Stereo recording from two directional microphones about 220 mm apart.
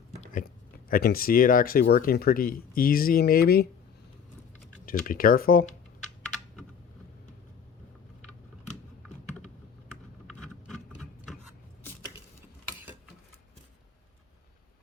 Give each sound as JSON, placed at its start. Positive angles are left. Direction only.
{"t": 0.2, "sound": "speech", "side_deg": 40}
{"t": 4.9, "sound": "speech", "side_deg": 40}
{"t": 10.2, "sound": "vehicle", "side_deg": 5}